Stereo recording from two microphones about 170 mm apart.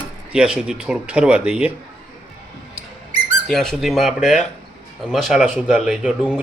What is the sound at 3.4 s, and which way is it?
Speech, 5° left (ahead or behind).